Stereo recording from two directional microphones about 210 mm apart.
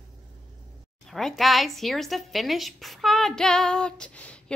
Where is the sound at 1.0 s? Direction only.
Centre (ahead or behind).